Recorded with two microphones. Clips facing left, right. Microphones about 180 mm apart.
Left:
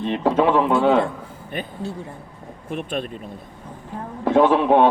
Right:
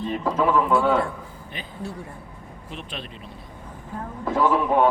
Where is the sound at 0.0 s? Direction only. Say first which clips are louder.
Left 4 dB; 75° left (ahead or behind).